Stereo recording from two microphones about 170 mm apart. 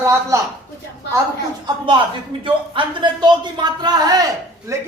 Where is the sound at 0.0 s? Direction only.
15° right (ahead or behind).